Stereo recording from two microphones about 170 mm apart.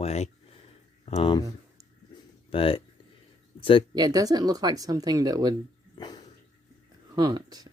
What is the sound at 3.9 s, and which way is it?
Speech, 20° right (ahead or behind).